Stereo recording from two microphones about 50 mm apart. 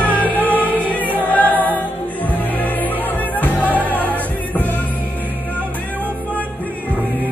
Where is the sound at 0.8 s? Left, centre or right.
Left.